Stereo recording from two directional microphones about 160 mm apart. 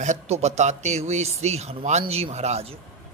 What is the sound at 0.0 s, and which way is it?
A man's voice, 45° right (ahead or behind).